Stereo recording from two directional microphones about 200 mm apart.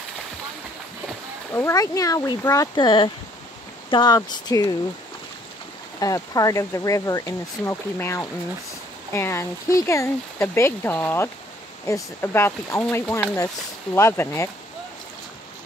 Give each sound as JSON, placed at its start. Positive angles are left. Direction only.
{"t": 1.5, "sound": "speech", "side_deg": 15}
{"t": 5.9, "sound": "speech", "side_deg": 15}